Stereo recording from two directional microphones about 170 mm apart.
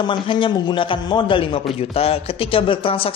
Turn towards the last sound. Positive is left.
turn(degrees=35)  # may be behind; listen again after turning